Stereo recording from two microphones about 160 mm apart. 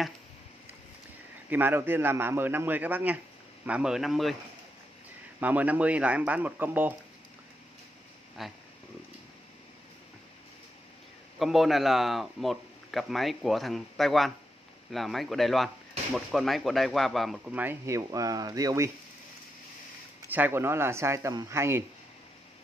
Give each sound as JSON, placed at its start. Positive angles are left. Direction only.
{"t": 1.5, "sound": "speech", "side_deg": -15}
{"t": 5.4, "sound": "speech", "side_deg": -10}
{"t": 8.4, "sound": "speech", "side_deg": 0}
{"t": 11.3, "sound": "speech", "side_deg": 0}
{"t": 20.2, "sound": "speech", "side_deg": -10}